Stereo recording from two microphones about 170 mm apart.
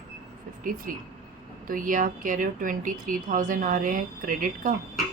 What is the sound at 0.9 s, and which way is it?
Speech, 55° right (ahead or behind).